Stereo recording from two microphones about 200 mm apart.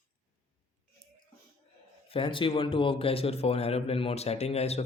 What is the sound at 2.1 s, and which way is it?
A man's voice, 25° left (ahead or behind).